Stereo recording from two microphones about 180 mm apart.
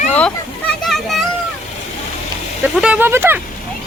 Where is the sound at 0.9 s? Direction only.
Centre (ahead or behind).